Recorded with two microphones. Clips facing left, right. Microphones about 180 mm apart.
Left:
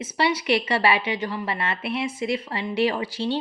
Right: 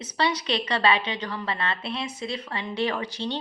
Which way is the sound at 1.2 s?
25° left (ahead or behind).